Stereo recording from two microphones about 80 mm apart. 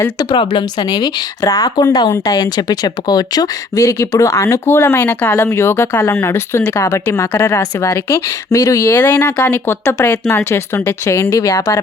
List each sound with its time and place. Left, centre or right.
0.3 s a woman's voice: left
8.9 s speech: left